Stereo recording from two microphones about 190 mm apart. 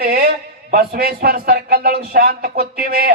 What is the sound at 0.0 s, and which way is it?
A man's voice, 50° right (ahead or behind).